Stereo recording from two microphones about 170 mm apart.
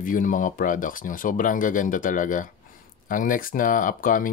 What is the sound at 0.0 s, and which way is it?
Speech, 50° left (ahead or behind).